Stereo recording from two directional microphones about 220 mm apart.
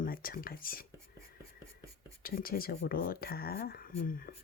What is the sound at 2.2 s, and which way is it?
Speech, 40° left (ahead or behind).